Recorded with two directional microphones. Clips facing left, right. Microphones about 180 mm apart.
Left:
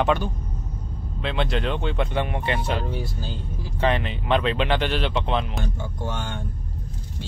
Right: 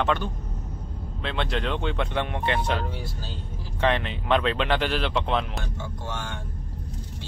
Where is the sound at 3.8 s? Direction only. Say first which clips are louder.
Left 1 dB; 5° left (ahead or behind).